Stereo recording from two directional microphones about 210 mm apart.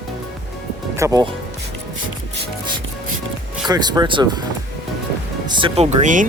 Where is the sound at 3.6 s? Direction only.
20° right (ahead or behind).